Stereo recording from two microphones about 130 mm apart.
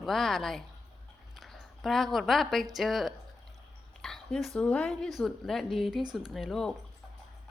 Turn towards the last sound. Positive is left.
turn(degrees=0)  # may be behind; listen again after turning